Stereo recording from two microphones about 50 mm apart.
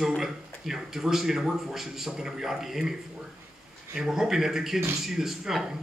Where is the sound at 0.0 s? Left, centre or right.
Centre.